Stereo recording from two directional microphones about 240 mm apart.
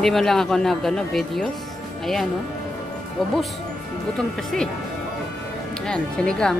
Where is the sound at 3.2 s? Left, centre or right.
Centre.